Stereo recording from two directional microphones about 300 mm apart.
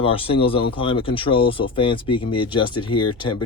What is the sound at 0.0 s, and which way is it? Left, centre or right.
Speech, centre.